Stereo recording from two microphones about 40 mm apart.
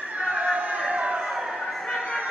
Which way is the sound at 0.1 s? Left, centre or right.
Right.